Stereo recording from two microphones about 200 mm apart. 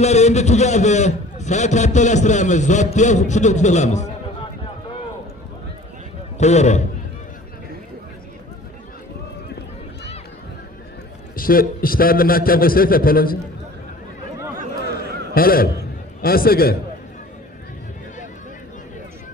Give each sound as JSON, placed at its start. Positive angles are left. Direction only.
{"t": 0.0, "sound": "a man's voice", "side_deg": 35}
{"t": 6.3, "sound": "a man's voice", "side_deg": 35}
{"t": 11.3, "sound": "a man's voice", "side_deg": 45}
{"t": 15.3, "sound": "a man's voice", "side_deg": 45}